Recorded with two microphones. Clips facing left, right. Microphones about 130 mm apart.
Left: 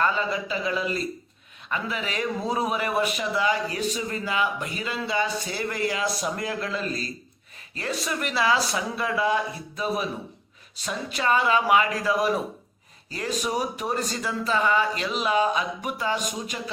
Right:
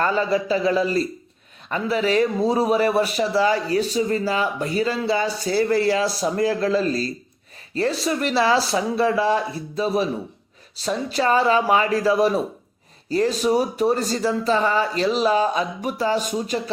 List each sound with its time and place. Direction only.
0.0 s speech: 40° right (ahead or behind)